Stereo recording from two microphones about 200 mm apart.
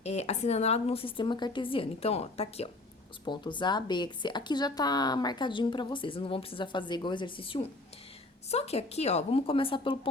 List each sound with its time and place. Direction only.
0.0 s a woman's voice: 30° left (ahead or behind)